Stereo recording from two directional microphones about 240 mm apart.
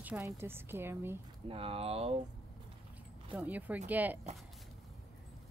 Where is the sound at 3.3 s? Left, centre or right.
Centre.